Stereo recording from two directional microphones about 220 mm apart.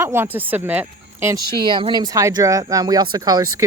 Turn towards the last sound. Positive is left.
turn(degrees=-15)  # may be behind; listen again after turning